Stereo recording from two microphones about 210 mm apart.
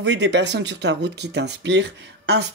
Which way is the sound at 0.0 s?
55° right (ahead or behind).